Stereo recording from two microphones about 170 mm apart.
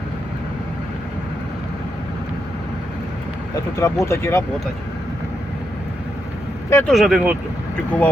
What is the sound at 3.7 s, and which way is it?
Speech, 15° left (ahead or behind).